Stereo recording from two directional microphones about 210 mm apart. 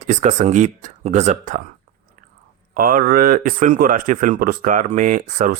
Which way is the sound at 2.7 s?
40° right (ahead or behind).